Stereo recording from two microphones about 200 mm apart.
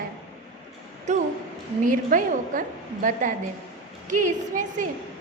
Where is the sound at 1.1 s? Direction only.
35° right (ahead or behind).